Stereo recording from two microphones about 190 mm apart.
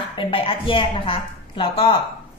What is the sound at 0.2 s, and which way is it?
A woman's voice, 30° left (ahead or behind).